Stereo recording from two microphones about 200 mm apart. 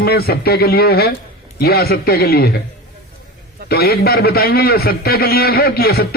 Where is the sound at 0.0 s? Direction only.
50° left (ahead or behind).